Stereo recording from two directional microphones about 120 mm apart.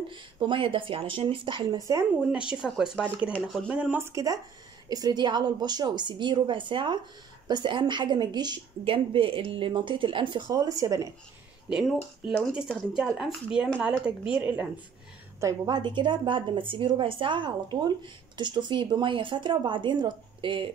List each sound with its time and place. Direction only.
0.1 s speech: 45° right (ahead or behind)
1.8 s speech: 30° right (ahead or behind)
2.5 s speech: 5° right (ahead or behind)
4.0 s a woman's voice: 25° right (ahead or behind)
12.5 s speech: 5° right (ahead or behind)
15.4 s a woman's voice: 35° right (ahead or behind)